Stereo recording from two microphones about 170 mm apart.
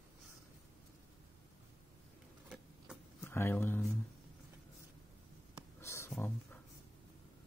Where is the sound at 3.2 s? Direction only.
15° left (ahead or behind).